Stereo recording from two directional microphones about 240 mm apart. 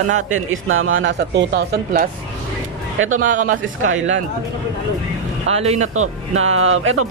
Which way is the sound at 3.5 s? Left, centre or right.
Right.